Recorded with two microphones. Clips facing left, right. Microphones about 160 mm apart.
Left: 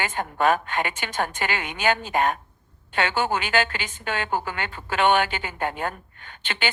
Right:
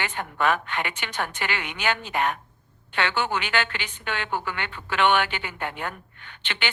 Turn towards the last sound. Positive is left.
turn(degrees=45)  # may be behind; listen again after turning